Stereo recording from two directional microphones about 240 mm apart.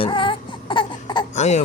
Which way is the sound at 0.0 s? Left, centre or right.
Left.